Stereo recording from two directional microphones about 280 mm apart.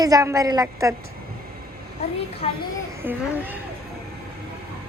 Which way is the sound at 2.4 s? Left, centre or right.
Left.